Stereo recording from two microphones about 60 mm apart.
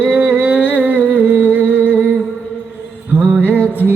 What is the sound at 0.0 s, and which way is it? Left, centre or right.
Music, right.